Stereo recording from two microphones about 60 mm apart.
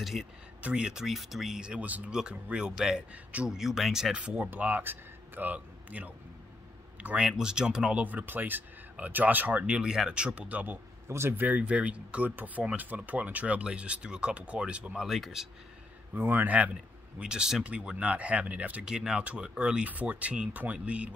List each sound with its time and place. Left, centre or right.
0.0 s speech: centre
0.6 s speech: centre
1.6 s speech: centre
4.5 s a man's voice: right
8.0 s speech: right
11.1 s speech: right
11.3 s speech: right
15.0 s speech: centre
16.2 s speech: right
17.2 s speech: centre